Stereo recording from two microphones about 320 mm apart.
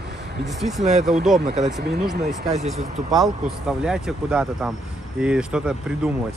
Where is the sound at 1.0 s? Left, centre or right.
Centre.